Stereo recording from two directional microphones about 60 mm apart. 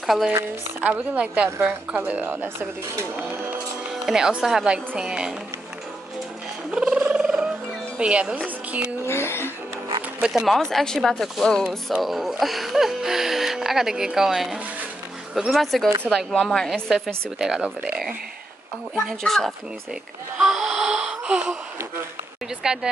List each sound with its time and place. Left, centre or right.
0.0 s speech: centre
0.7 s a woman's voice: right
4.0 s speech: centre
6.7 s a sound: centre
8.0 s speech: centre
9.0 s speech: left
10.2 s speech: centre
10.5 s speech: centre
16.3 s a woman's voice: centre
16.9 s speech: centre
19.0 s speech: centre
20.3 s a sound: centre
22.6 s speech: centre